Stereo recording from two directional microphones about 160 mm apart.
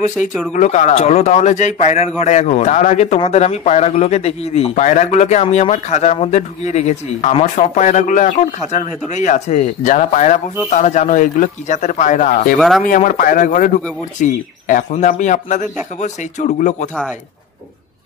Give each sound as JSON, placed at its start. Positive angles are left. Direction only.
{"t": 0.5, "sound": "a man's voice", "side_deg": 50}
{"t": 12.5, "sound": "speech", "side_deg": 0}
{"t": 12.8, "sound": "a man's voice", "side_deg": 55}